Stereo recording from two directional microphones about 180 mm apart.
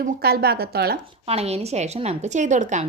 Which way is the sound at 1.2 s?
35° right (ahead or behind).